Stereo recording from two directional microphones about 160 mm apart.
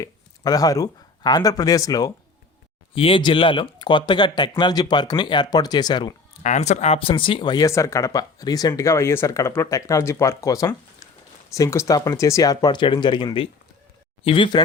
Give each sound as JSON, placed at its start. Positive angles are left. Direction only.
{"t": 0.0, "sound": "speech", "side_deg": 25}
{"t": 2.9, "sound": "speech", "side_deg": 35}
{"t": 6.4, "sound": "speech", "side_deg": 45}